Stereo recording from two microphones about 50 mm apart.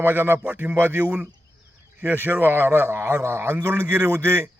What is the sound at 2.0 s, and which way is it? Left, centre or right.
A man's voice, right.